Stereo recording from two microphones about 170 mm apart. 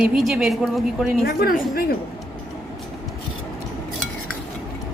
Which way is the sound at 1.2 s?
65° left (ahead or behind).